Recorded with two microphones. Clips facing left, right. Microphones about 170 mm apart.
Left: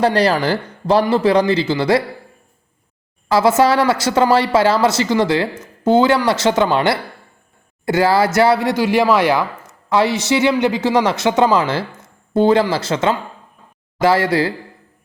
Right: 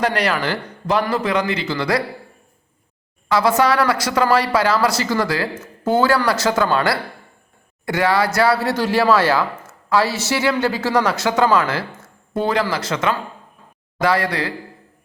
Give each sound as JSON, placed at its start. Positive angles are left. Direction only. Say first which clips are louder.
{"t": 0.0, "sound": "speech", "louder": "left 5 dB", "side_deg": 35}
{"t": 3.2, "sound": "speech", "louder": "left 3 dB", "side_deg": 25}